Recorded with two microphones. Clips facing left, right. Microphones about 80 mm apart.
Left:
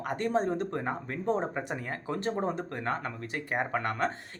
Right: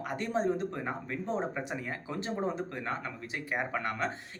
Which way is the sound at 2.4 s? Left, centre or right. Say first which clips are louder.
Left 2 dB; left.